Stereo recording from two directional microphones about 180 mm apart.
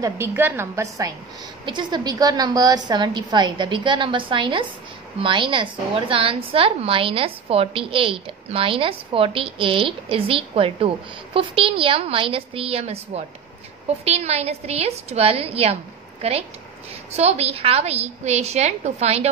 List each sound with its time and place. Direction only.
0.0 s a woman's voice: 15° right (ahead or behind); by 19.3 s 35° right (ahead or behind)